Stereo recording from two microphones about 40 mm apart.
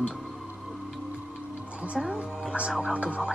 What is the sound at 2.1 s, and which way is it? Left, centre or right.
A woman's voice, right.